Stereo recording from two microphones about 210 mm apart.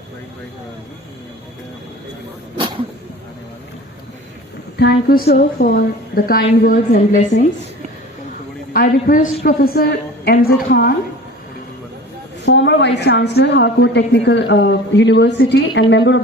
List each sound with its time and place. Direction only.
2.6 s a sound: 25° right (ahead or behind)
4.8 s a woman's voice: 50° left (ahead or behind)
8.7 s a woman's voice: 45° left (ahead or behind)
12.5 s a woman's voice: 55° left (ahead or behind)